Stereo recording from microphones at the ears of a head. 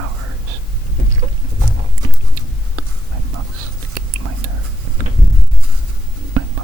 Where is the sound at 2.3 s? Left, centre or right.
Right.